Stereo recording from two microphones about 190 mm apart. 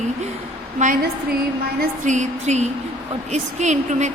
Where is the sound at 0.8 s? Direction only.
50° right (ahead or behind).